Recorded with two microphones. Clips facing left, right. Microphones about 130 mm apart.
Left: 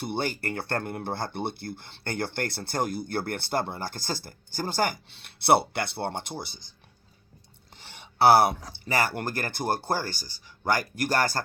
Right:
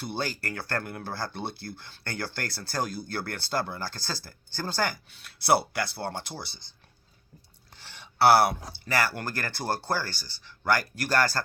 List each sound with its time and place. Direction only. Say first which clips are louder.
0.0 s speech: left 3 dB; 20° left (ahead or behind)
7.8 s a sound: left 1 dB; 20° left (ahead or behind)
8.8 s speech: left 1 dB; 20° left (ahead or behind)